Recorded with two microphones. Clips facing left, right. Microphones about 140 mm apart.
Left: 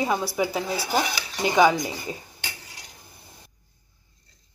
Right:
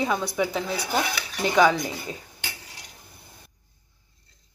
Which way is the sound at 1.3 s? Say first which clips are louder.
Left 1 dB; 20° left (ahead or behind).